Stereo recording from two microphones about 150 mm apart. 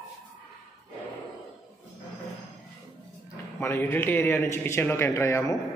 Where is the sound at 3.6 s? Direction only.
15° left (ahead or behind).